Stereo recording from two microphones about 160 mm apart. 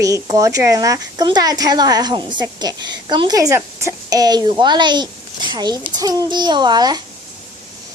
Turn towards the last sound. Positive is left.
turn(degrees=-25)  # may be behind; listen again after turning